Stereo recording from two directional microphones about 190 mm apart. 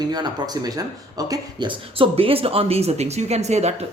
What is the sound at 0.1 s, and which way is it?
Speech, 20° right (ahead or behind).